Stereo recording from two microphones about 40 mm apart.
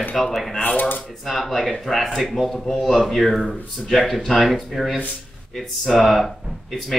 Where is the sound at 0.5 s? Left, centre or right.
Left.